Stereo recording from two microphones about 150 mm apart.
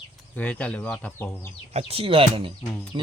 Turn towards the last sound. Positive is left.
turn(degrees=-30)  # may be behind; listen again after turning